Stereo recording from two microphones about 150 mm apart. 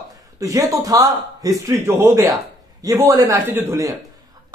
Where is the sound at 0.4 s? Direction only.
20° right (ahead or behind).